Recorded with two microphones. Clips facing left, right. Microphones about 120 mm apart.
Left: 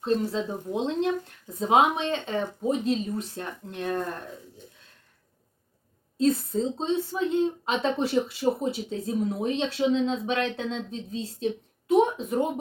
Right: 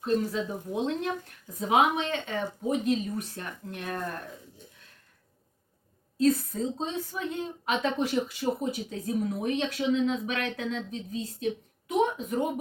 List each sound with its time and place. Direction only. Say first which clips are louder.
0.0 s a woman's voice: left 2 dB; 25° left (ahead or behind)
6.1 s a woman's voice: left 1 dB; 25° left (ahead or behind)